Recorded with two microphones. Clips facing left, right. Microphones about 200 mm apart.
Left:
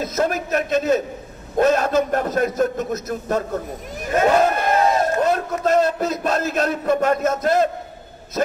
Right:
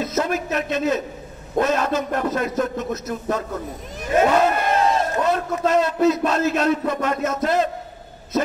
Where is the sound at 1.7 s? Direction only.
45° left (ahead or behind).